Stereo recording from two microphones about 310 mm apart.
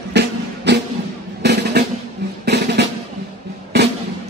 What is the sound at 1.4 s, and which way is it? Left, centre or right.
Drum, right.